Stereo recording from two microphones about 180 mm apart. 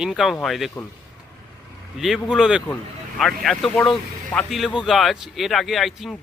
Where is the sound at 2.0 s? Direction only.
Centre (ahead or behind).